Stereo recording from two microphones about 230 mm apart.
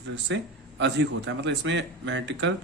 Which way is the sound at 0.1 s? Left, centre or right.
Right.